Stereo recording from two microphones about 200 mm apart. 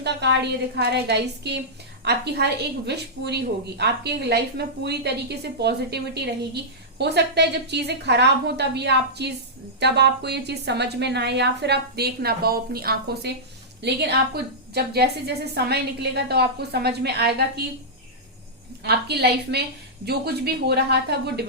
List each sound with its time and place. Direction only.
0.0 s a woman's voice: 60° right (ahead or behind)
18.8 s a woman's voice: 55° right (ahead or behind)